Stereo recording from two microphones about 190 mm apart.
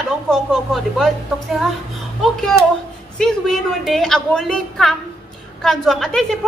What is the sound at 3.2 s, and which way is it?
A woman's voice, centre (ahead or behind).